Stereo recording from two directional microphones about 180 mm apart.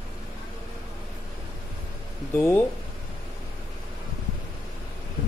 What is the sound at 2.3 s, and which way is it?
Speech, 10° left (ahead or behind).